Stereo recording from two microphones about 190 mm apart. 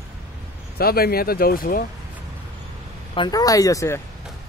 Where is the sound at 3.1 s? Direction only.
20° left (ahead or behind).